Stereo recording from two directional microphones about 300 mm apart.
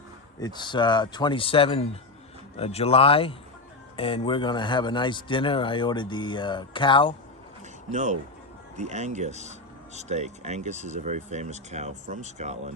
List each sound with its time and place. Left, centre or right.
0.3 s a man's voice: centre
7.9 s speech: right